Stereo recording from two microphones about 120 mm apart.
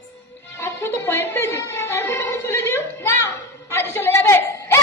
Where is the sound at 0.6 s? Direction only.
20° left (ahead or behind).